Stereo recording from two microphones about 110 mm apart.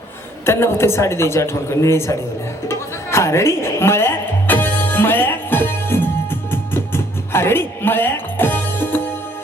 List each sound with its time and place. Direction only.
0.4 s a woman's voice: 25° left (ahead or behind)
2.6 s music: 25° left (ahead or behind)